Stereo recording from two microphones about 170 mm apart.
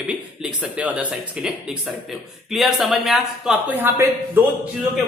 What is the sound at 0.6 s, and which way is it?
Speech, 5° right (ahead or behind).